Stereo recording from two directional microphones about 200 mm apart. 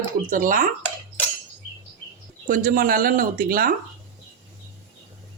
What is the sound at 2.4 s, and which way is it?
Speech, 40° right (ahead or behind).